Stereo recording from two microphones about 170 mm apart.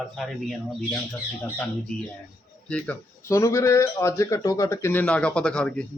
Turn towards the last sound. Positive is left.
turn(degrees=5)  # may be behind; listen again after turning